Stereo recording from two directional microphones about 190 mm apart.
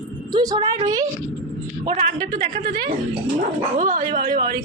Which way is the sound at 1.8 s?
40° right (ahead or behind).